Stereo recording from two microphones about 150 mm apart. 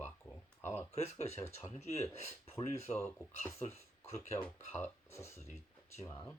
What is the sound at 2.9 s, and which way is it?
Speech, 15° left (ahead or behind).